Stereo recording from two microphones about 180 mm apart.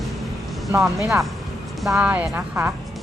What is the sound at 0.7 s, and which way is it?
Speech, 15° right (ahead or behind).